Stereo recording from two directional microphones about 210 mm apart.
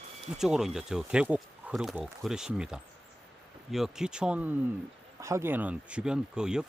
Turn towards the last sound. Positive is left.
turn(degrees=-5)  # may be behind; listen again after turning